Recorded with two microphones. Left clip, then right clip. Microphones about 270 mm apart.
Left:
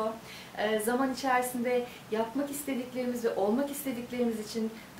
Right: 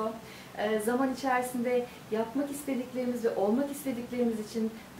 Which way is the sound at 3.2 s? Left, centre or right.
Centre.